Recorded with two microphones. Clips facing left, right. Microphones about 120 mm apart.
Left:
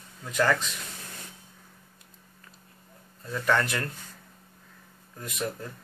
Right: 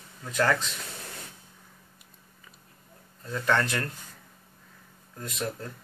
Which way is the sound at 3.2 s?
5° left (ahead or behind).